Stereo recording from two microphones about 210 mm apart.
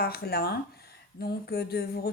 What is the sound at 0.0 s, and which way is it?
A woman's voice, 50° left (ahead or behind).